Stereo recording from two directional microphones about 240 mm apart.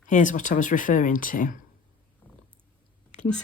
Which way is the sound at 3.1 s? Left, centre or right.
Left.